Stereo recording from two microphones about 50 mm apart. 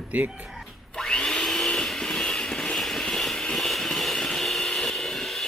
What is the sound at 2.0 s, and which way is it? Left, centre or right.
Vehicle, centre.